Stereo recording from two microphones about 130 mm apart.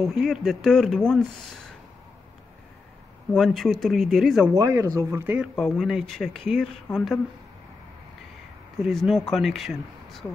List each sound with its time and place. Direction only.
0.2 s speech: centre (ahead or behind)
3.3 s speech: centre (ahead or behind)
4.6 s speech: 25° right (ahead or behind)
5.6 s speech: centre (ahead or behind)
8.8 s speech: centre (ahead or behind)